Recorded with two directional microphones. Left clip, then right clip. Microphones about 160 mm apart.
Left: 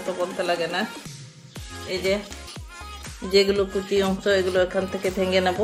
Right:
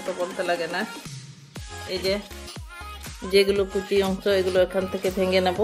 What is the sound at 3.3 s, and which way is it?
A woman's voice, 20° right (ahead or behind).